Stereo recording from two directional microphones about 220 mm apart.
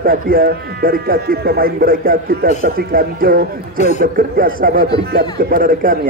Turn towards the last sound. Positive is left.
turn(degrees=-40)  # may be behind; listen again after turning